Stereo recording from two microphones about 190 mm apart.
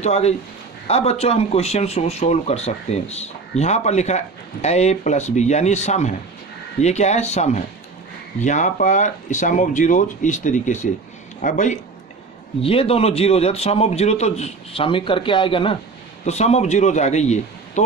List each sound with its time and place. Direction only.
0.0 s a man's voice: 35° left (ahead or behind)